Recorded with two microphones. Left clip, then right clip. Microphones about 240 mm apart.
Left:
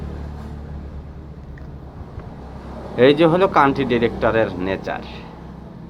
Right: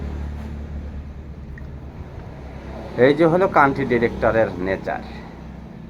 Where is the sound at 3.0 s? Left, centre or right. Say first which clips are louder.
Left 2 dB; centre.